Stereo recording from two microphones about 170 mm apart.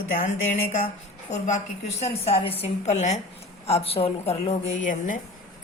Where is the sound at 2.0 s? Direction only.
35° left (ahead or behind).